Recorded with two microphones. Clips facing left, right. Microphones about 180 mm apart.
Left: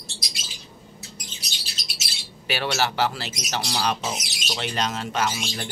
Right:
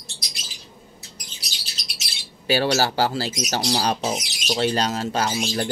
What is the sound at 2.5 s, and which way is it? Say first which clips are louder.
Speech: right 5 dB; 30° right (ahead or behind).